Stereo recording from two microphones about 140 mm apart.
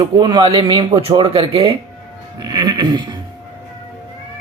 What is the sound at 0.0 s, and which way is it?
Mantra, 30° right (ahead or behind).